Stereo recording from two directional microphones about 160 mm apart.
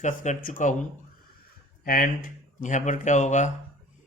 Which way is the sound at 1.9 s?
60° left (ahead or behind).